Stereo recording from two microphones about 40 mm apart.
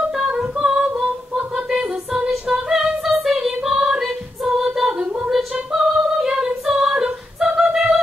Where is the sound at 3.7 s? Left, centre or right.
Centre.